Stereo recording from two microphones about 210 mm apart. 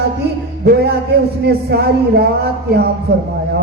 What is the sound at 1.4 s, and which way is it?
Music, 50° right (ahead or behind).